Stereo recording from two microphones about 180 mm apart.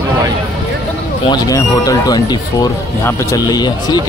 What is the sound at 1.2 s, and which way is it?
Speech, 20° left (ahead or behind).